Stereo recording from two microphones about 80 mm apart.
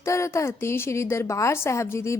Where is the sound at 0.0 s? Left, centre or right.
Left.